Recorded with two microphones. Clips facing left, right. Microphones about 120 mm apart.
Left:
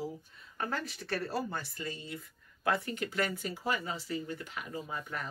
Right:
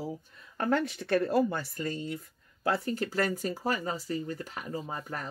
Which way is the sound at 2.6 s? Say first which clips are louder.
Right 3 dB; 35° right (ahead or behind).